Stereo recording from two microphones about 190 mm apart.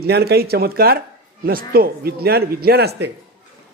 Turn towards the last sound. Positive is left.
turn(degrees=-60)  # may be behind; listen again after turning